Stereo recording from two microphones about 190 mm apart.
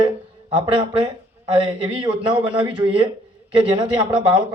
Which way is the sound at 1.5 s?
25° right (ahead or behind).